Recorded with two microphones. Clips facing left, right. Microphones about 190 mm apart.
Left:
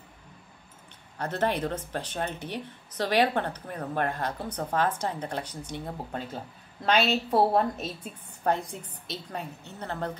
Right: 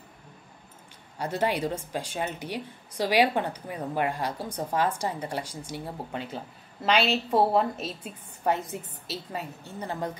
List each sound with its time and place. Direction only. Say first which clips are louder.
1.1 s a woman's voice: right 1 dB; 10° right (ahead or behind)